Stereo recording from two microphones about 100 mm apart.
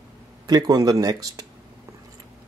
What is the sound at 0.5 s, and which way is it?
Speech, 40° right (ahead or behind).